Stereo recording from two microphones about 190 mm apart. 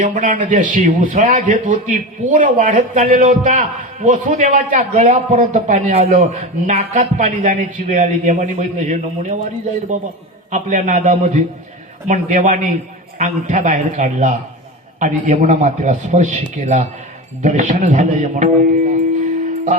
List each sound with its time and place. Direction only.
0.0 s a man's voice: 45° right (ahead or behind)
10.5 s a man's voice: 40° right (ahead or behind)